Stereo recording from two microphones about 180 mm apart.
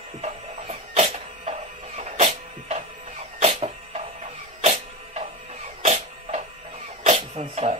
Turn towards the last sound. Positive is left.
turn(degrees=-35)  # may be behind; listen again after turning